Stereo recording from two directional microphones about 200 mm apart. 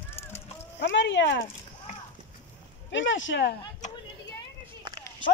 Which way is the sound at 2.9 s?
65° left (ahead or behind).